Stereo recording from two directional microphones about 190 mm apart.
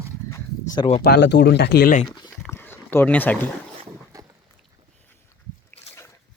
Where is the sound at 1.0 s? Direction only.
60° left (ahead or behind).